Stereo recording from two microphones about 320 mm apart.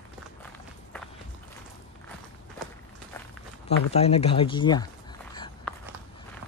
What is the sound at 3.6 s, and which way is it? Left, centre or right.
Speech, centre.